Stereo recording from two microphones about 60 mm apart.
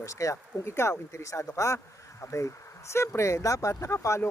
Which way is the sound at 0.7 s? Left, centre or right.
Left.